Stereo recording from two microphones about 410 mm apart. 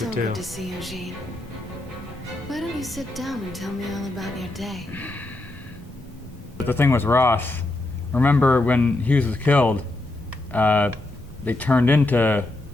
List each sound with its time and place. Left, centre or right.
0.1 s speech: right
0.3 s a woman's voice: centre
2.5 s a woman's voice: centre
6.7 s a woman's voice: centre